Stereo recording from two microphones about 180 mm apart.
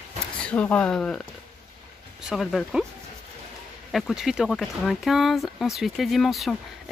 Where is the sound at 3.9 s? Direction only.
Centre (ahead or behind).